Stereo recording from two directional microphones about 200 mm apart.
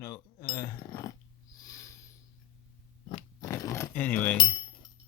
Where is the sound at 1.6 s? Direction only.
15° left (ahead or behind).